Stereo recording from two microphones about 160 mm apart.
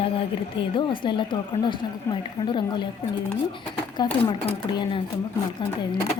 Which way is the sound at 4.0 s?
25° left (ahead or behind).